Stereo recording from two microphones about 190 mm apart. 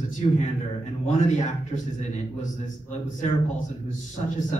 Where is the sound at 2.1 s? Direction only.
40° left (ahead or behind).